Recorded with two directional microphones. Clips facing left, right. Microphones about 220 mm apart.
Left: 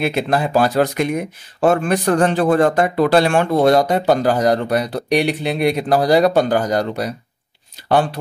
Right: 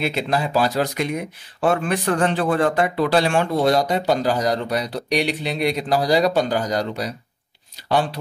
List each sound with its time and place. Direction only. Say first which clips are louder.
0.0 s speech: left 4 dB; 55° left (ahead or behind)